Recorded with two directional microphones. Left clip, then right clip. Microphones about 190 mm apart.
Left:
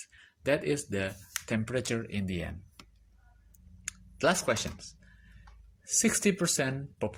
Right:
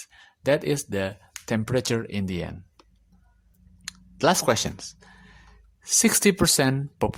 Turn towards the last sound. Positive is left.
turn(degrees=-35)  # may be behind; listen again after turning